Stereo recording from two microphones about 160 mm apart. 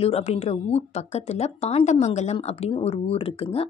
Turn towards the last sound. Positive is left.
turn(degrees=35)  # may be behind; listen again after turning